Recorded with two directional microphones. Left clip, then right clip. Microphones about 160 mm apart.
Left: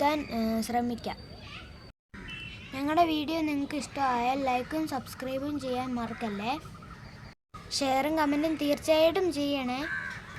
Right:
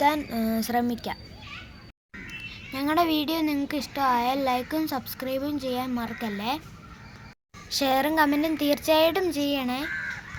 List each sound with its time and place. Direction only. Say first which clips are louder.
0.0 s speech: right 4 dB; 10° right (ahead or behind)
2.5 s a child's voice: right 4 dB; 20° right (ahead or behind)
7.7 s a child's voice: right 4 dB; 20° right (ahead or behind)